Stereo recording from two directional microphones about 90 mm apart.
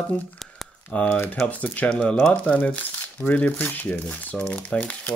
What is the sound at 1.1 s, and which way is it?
Speech, 20° left (ahead or behind).